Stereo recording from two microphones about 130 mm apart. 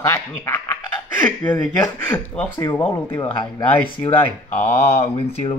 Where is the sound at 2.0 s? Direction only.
15° left (ahead or behind).